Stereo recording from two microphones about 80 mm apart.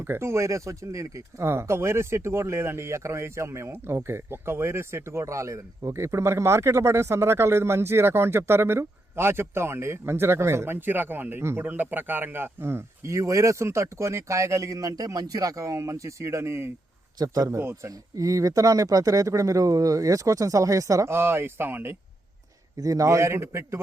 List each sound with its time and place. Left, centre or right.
0.0 s speech: right
17.2 s speech: right
21.1 s speech: right
22.8 s speech: right